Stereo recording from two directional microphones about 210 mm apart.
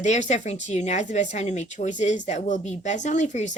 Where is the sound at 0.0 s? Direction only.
35° left (ahead or behind).